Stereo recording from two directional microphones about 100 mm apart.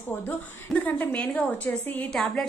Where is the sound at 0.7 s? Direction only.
10° left (ahead or behind).